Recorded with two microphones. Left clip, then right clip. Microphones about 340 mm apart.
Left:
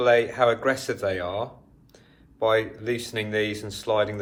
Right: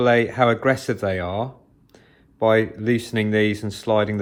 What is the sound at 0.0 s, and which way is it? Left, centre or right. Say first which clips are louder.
Speech: right 2 dB; right.